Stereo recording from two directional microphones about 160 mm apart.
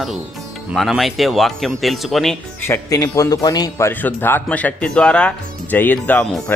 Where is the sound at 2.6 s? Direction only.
20° left (ahead or behind).